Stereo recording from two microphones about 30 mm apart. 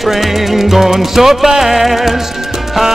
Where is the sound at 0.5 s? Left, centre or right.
Centre.